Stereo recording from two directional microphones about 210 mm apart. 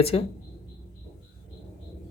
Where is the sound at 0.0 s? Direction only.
30° left (ahead or behind).